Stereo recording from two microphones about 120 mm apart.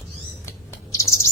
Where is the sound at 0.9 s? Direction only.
25° left (ahead or behind).